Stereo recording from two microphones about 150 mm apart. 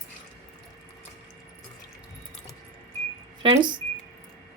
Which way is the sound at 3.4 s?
30° right (ahead or behind).